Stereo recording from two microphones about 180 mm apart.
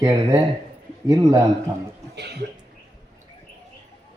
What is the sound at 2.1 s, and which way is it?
Speech, 65° right (ahead or behind).